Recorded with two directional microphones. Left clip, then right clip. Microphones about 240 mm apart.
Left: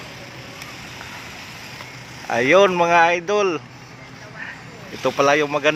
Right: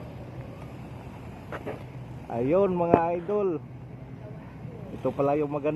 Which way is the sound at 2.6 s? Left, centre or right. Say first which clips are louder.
Left 8 dB; left.